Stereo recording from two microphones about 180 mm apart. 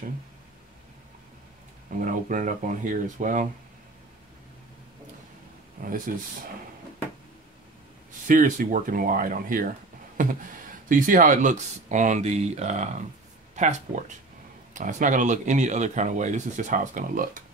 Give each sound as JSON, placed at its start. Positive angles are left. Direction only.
{"t": 2.0, "sound": "a man's voice", "side_deg": -45}
{"t": 5.8, "sound": "speech", "side_deg": -55}
{"t": 8.3, "sound": "a man's voice", "side_deg": -45}
{"t": 10.9, "sound": "a man's voice", "side_deg": -50}